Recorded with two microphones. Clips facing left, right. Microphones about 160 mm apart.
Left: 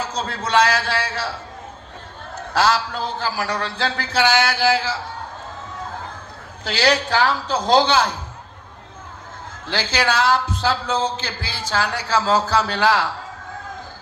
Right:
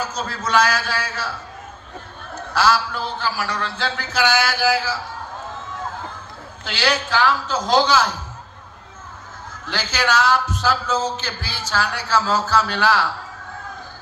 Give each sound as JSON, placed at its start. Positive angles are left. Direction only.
{"t": 0.0, "sound": "a man's voice", "side_deg": 30}
{"t": 2.5, "sound": "a man's voice", "side_deg": 35}
{"t": 6.7, "sound": "a man's voice", "side_deg": 35}
{"t": 9.6, "sound": "a man's voice", "side_deg": 30}